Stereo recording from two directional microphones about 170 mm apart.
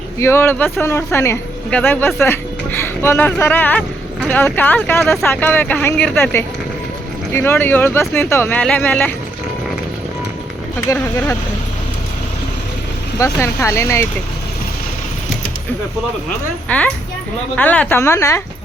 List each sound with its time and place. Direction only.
0.2 s speech: 15° left (ahead or behind)
10.8 s speech: 15° left (ahead or behind)
13.1 s speech: 20° left (ahead or behind)
16.6 s speech: 10° left (ahead or behind)